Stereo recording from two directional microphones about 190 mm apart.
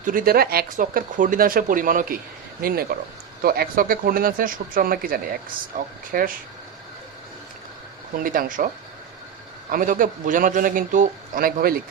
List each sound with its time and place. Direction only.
0.0 s speech: 45° right (ahead or behind)
8.2 s speech: 45° right (ahead or behind)